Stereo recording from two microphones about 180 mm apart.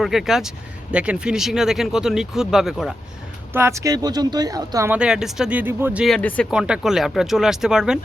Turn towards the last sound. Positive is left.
turn(degrees=-5)  # may be behind; listen again after turning